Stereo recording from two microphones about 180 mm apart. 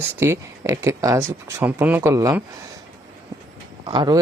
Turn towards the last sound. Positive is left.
turn(degrees=-20)  # may be behind; listen again after turning